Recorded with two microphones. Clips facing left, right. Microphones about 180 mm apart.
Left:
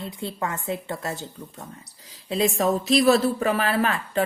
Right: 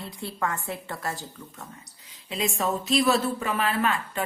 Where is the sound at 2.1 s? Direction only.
35° left (ahead or behind).